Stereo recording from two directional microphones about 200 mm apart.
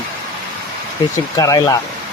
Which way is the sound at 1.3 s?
20° left (ahead or behind).